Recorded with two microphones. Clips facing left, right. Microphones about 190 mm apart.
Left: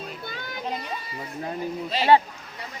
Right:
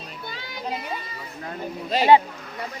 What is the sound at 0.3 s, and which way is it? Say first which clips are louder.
Music: left 1 dB; 55° left (ahead or behind).